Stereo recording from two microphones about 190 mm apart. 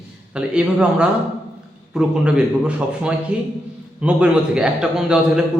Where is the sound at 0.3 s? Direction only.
5° right (ahead or behind).